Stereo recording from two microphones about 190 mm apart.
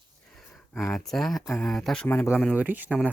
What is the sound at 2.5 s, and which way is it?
Speech, 10° right (ahead or behind).